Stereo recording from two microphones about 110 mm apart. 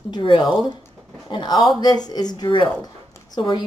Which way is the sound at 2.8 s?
35° left (ahead or behind).